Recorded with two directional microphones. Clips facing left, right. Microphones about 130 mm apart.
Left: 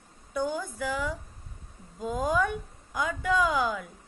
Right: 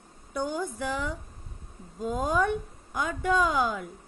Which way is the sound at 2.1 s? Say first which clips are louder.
Right 1 dB; 25° right (ahead or behind).